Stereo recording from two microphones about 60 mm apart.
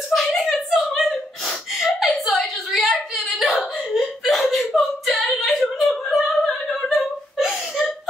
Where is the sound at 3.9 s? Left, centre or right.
Centre.